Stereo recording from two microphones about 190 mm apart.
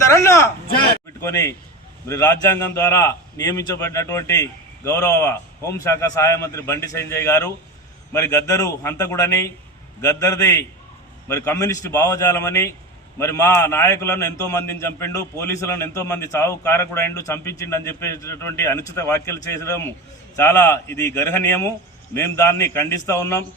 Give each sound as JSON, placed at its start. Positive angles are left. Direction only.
{"t": 0.0, "sound": "a man's voice", "side_deg": 15}